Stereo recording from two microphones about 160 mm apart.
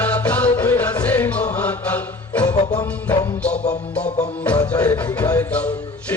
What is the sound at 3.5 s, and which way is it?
Music, 45° left (ahead or behind).